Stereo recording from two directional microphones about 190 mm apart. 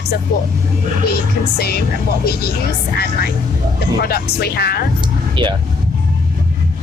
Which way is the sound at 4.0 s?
55° left (ahead or behind).